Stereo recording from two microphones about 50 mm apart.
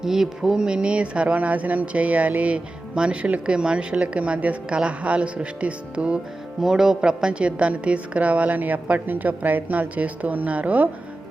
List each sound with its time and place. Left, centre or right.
0.0 s speech: centre; by 6.1 s right
6.6 s speech: centre; by 10.8 s right